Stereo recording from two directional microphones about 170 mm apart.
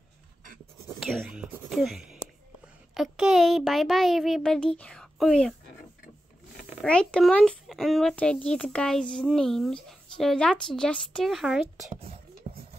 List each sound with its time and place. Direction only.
0.8 s whispering: centre (ahead or behind)
2.9 s a child's voice: centre (ahead or behind)
6.8 s a child's voice: 5° left (ahead or behind)
12.0 s beatboxing: 35° right (ahead or behind)